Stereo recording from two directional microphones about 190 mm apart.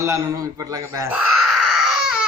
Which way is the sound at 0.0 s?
15° right (ahead or behind).